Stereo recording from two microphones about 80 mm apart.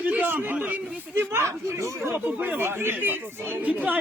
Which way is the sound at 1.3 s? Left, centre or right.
Right.